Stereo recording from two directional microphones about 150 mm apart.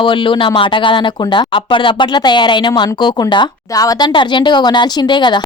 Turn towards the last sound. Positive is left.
turn(degrees=30)  # may be behind; listen again after turning